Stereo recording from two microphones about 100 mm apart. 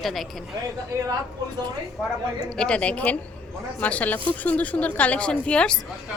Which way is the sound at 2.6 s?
10° left (ahead or behind).